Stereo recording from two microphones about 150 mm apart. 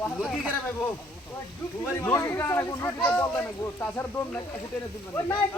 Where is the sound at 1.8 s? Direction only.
15° left (ahead or behind).